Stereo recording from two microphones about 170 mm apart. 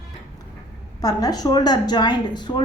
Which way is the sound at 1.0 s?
20° left (ahead or behind).